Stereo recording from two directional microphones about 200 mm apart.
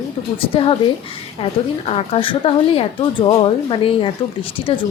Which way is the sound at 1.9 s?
30° left (ahead or behind).